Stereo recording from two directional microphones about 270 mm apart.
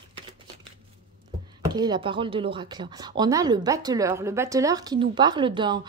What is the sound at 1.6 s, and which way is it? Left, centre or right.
Speech, centre.